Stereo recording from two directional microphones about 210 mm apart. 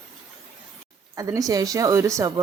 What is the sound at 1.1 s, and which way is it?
A woman's voice, 15° right (ahead or behind).